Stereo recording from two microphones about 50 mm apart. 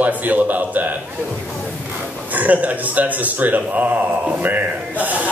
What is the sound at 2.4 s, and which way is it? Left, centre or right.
Speech, right.